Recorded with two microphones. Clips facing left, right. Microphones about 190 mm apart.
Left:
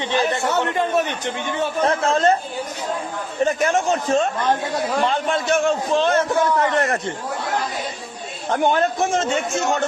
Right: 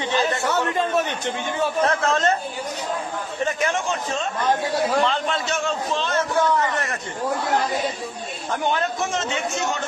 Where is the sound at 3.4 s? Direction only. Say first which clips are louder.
Left 5 dB; 40° left (ahead or behind); by 7.0 s 55° left (ahead or behind).